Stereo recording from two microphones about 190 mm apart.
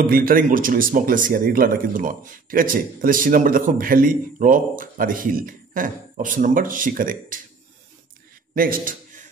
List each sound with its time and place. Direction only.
0.0 s speech: 50° right (ahead or behind)
8.5 s a man's voice: 50° right (ahead or behind)